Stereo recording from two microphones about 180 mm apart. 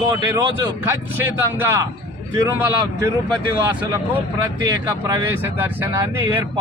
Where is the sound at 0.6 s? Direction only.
10° right (ahead or behind).